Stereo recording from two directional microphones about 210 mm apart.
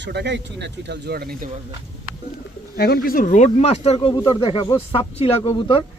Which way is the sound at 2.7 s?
50° left (ahead or behind).